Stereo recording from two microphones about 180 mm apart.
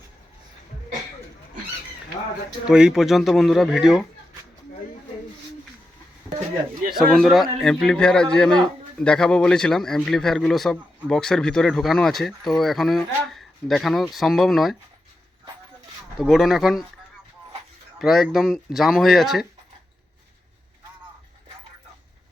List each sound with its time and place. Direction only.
2.6 s a man's voice: 5° right (ahead or behind)
7.1 s a man's voice: centre (ahead or behind)
16.1 s a man's voice: centre (ahead or behind)
18.0 s a man's voice: centre (ahead or behind)